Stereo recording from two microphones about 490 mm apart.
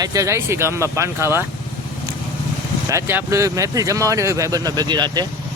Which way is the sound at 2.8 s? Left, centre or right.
Centre.